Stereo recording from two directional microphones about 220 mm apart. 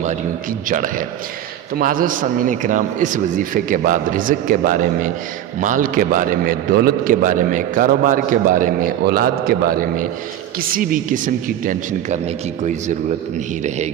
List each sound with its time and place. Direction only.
0.7 s a man's voice: 40° right (ahead or behind)